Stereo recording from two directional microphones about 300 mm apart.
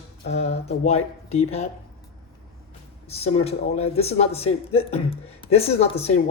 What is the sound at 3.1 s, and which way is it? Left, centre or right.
A man's voice, centre.